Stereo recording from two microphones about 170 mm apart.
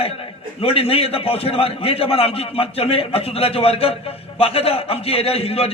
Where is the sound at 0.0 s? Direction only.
35° left (ahead or behind).